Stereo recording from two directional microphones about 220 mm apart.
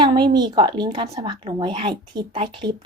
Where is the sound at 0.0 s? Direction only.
20° right (ahead or behind).